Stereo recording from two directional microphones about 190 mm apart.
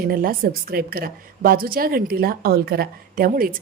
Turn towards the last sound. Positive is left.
turn(degrees=-50)  # may be behind; listen again after turning